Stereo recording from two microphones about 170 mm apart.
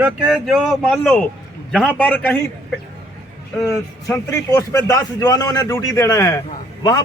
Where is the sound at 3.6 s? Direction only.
15° left (ahead or behind).